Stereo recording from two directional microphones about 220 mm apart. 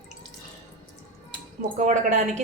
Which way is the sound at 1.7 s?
35° right (ahead or behind).